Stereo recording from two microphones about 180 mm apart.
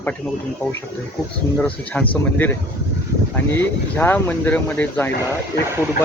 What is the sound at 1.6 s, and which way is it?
Speech, 10° left (ahead or behind).